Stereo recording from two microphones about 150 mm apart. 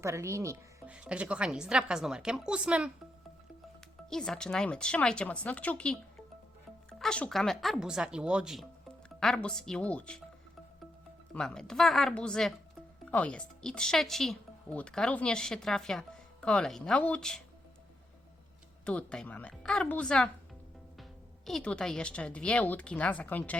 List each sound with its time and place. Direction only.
0.0 s speech: 20° right (ahead or behind)
0.9 s speech: 5° right (ahead or behind)
4.1 s speech: 5° left (ahead or behind)
7.0 s speech: 5° left (ahead or behind)
11.3 s speech: 5° left (ahead or behind)
18.9 s speech: 10° left (ahead or behind)